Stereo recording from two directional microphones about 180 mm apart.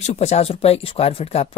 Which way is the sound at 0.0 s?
35° left (ahead or behind).